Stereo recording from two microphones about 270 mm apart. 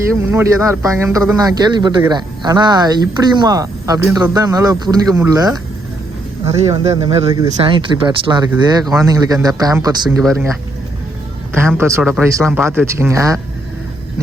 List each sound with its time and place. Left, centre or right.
0.1 s speech: centre
6.7 s speech: centre
11.5 s speech: centre